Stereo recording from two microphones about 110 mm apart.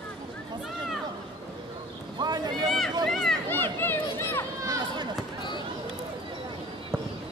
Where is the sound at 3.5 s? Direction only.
20° left (ahead or behind).